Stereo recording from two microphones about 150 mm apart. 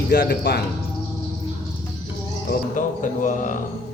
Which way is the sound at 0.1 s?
90° left.